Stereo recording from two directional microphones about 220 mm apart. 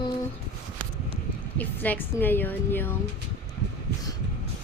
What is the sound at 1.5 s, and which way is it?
A woman's voice, 10° left (ahead or behind).